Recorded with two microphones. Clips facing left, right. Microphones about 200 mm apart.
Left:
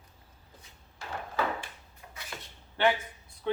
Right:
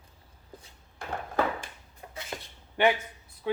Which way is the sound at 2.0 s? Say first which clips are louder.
Right 5 dB; 35° right (ahead or behind).